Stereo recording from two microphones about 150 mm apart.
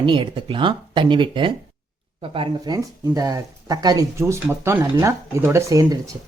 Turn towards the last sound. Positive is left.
turn(degrees=-20)  # may be behind; listen again after turning